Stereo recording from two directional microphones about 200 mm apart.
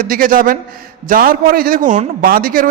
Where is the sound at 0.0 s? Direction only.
45° right (ahead or behind).